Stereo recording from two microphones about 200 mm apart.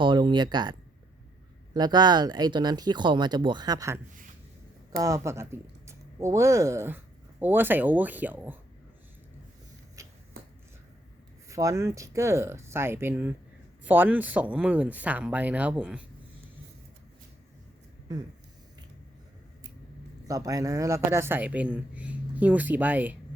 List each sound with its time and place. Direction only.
0.0 s speech: 25° right (ahead or behind)
10.0 s a sound: 15° right (ahead or behind)
11.4 s speech: 15° right (ahead or behind)
20.2 s speech: 15° right (ahead or behind)